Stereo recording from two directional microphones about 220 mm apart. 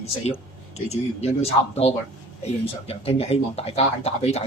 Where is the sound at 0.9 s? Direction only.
30° left (ahead or behind).